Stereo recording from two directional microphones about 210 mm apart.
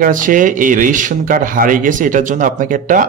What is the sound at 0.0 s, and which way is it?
Speech, 40° right (ahead or behind).